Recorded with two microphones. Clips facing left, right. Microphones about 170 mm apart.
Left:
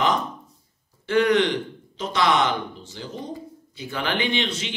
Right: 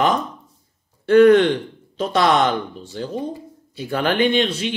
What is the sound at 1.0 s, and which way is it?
Speech, 55° right (ahead or behind).